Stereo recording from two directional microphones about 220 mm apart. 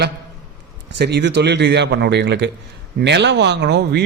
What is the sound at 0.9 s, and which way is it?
Speech, 50° right (ahead or behind).